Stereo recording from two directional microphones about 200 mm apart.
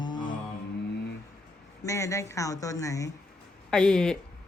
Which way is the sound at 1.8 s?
15° left (ahead or behind).